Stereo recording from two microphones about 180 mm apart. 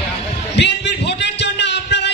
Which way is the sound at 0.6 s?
70° left (ahead or behind).